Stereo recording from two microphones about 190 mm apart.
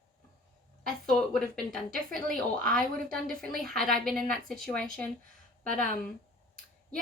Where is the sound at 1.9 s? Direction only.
50° right (ahead or behind).